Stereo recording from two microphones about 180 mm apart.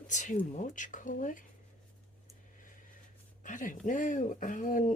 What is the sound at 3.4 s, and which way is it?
Speech, 45° left (ahead or behind).